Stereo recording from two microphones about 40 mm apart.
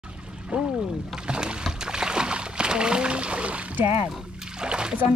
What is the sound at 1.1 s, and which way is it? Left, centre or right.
Splash, right.